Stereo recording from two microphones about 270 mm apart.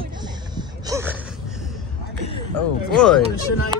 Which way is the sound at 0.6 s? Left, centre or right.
Centre.